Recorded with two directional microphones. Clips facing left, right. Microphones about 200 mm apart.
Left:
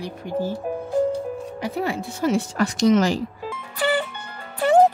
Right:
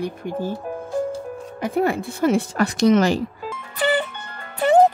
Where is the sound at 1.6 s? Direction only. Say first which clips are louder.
Right 7 dB; 50° right (ahead or behind).